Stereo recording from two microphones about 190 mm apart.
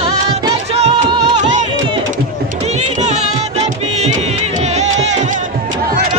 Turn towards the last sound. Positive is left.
turn(degrees=-35)  # may be behind; listen again after turning